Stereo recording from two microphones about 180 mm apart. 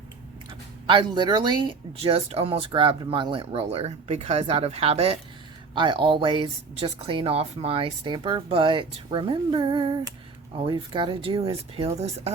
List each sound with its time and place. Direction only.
0.9 s speech: 25° right (ahead or behind)